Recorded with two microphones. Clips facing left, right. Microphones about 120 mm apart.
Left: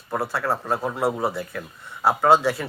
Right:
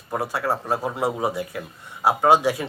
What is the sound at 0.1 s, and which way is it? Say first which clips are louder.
Speech: even; 15° right (ahead or behind).